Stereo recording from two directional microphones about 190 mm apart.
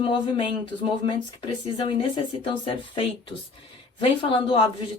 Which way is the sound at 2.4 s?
30° left (ahead or behind).